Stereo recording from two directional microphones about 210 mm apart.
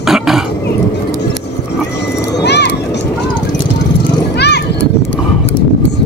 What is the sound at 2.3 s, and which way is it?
Children playing, 55° left (ahead or behind).